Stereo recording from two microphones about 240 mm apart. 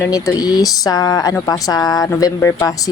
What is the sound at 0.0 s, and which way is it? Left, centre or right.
Speech, centre.